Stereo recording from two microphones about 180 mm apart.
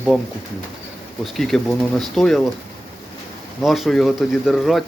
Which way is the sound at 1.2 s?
Centre (ahead or behind).